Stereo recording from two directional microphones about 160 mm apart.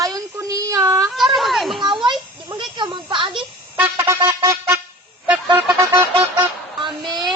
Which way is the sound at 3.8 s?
15° right (ahead or behind).